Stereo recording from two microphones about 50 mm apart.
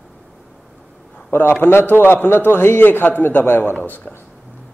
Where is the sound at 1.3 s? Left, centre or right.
Left.